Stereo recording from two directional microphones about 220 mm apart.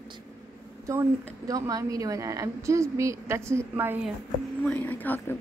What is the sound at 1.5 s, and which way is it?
A woman's voice, 15° right (ahead or behind).